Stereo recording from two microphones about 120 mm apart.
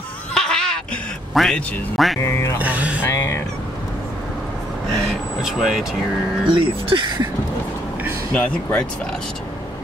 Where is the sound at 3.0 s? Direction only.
25° left (ahead or behind).